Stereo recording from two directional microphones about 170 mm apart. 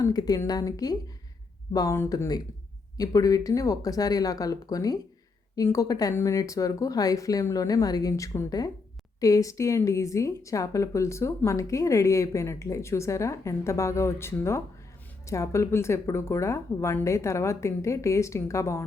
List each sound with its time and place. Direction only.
0.0 s a woman's voice: 20° left (ahead or behind)